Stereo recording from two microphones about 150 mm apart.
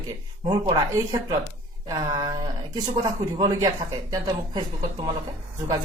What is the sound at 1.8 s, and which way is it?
A man's voice, 25° right (ahead or behind).